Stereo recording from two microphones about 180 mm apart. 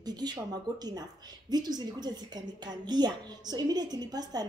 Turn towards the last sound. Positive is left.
turn(degrees=-20)  # may be behind; listen again after turning